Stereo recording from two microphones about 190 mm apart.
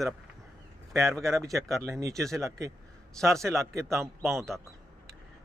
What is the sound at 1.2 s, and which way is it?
Speech, 15° right (ahead or behind).